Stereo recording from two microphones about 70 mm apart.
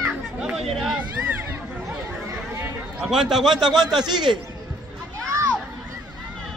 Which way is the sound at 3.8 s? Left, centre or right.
Right.